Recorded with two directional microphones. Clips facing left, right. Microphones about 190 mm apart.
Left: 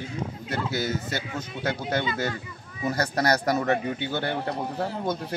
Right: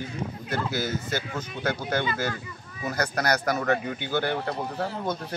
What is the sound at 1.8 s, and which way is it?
Speech, 20° left (ahead or behind).